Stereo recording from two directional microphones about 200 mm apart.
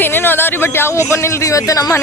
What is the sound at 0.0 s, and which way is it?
A man's voice, 10° left (ahead or behind).